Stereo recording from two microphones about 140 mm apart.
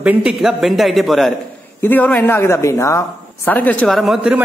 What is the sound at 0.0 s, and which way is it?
A man's voice, 5° right (ahead or behind).